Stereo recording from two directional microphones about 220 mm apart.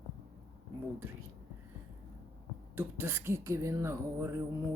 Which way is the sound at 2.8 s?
10° right (ahead or behind).